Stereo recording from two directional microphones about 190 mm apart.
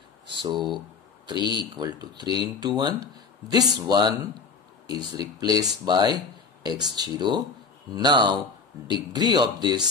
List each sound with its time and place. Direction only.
0.3 s speech: 25° right (ahead or behind)